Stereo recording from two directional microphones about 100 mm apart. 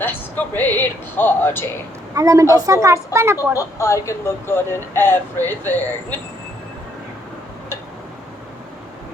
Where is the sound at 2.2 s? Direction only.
35° right (ahead or behind).